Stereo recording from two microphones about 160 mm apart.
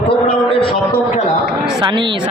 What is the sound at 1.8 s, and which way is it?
Speech, 30° right (ahead or behind).